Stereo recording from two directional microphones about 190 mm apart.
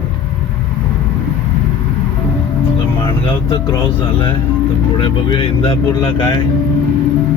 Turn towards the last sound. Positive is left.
turn(degrees=25)  # may be behind; listen again after turning